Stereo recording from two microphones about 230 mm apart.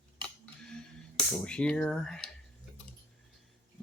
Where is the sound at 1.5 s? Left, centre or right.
Centre.